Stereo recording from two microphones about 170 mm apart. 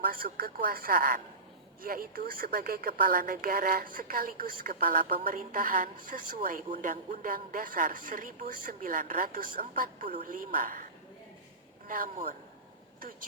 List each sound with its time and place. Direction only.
0.1 s a woman's voice: 60° right (ahead or behind)
11.9 s a woman's voice: 55° right (ahead or behind)